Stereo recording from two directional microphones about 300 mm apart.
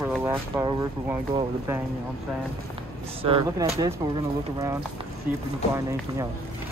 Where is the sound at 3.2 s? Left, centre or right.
Centre.